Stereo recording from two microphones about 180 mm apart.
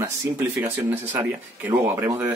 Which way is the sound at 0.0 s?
15° right (ahead or behind).